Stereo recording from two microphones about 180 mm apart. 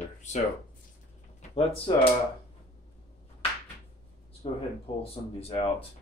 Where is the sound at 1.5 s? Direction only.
35° left (ahead or behind).